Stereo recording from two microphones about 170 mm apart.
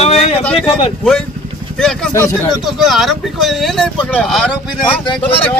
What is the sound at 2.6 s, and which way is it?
Speech, centre (ahead or behind).